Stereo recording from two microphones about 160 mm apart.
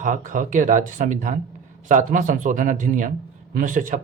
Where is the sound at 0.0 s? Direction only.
55° right (ahead or behind).